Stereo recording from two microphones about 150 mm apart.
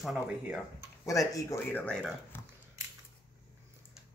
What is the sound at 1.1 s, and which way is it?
Speech, 20° left (ahead or behind).